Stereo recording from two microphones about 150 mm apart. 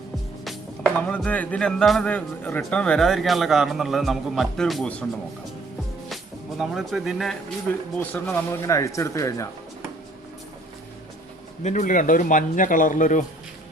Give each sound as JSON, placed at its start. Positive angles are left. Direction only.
{"t": 0.4, "sound": "speech", "side_deg": 5}
{"t": 6.6, "sound": "speech", "side_deg": 0}
{"t": 7.7, "sound": "a man's voice", "side_deg": 15}
{"t": 11.6, "sound": "a man's voice", "side_deg": 55}